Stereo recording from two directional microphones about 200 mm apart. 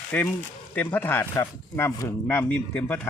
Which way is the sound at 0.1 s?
5° left (ahead or behind).